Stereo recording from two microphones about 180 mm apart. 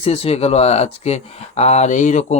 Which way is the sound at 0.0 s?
35° left (ahead or behind).